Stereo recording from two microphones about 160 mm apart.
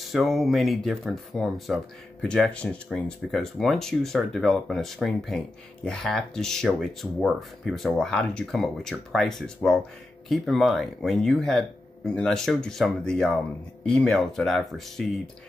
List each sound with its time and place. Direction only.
0.0 s speech: centre (ahead or behind)